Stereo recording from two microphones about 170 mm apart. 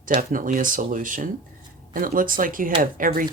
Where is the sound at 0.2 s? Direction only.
50° right (ahead or behind).